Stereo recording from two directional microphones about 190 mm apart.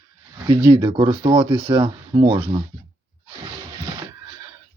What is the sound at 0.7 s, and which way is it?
Speech, 25° right (ahead or behind).